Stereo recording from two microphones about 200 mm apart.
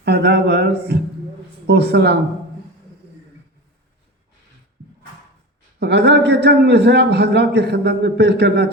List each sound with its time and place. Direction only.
0.0 s a man's voice: 55° right (ahead or behind)
5.8 s a man's voice: 55° right (ahead or behind)